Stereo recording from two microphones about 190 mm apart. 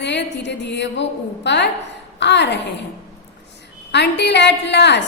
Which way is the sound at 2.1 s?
65° left (ahead or behind).